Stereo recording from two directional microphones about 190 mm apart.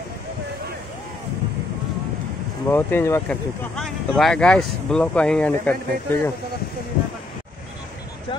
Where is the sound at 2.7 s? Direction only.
10° left (ahead or behind).